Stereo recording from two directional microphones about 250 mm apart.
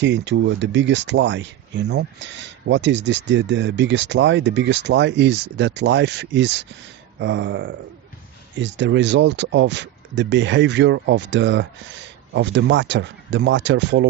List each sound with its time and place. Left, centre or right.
0.0 s speech: right